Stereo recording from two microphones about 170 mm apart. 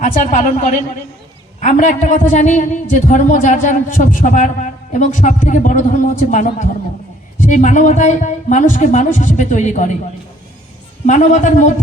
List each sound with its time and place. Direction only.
0.0 s a man's voice: 45° left (ahead or behind)
11.0 s a man's voice: 45° left (ahead or behind)